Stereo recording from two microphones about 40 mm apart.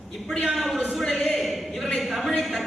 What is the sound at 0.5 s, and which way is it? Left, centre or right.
Speech, centre.